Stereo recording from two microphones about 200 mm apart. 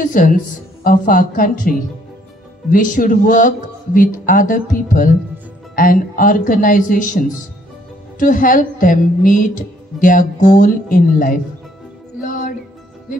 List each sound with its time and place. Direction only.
0.0 s speech: 40° left (ahead or behind)
2.7 s music: 40° left (ahead or behind)
5.8 s speech: 45° left (ahead or behind)
8.2 s music: 40° left (ahead or behind)